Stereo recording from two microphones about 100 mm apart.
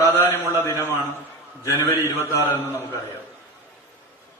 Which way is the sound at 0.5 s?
30° left (ahead or behind).